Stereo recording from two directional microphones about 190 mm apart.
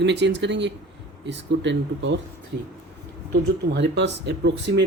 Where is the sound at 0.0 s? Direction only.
65° right (ahead or behind).